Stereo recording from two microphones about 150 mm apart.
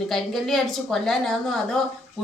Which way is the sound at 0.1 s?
Centre (ahead or behind).